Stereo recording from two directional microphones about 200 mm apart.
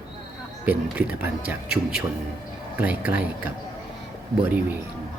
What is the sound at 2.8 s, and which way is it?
Speech, 10° right (ahead or behind).